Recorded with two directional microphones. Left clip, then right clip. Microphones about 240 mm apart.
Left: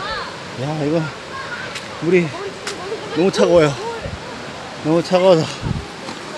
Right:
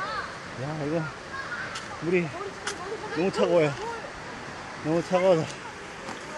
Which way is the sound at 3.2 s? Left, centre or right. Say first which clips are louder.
Left 10 dB; left.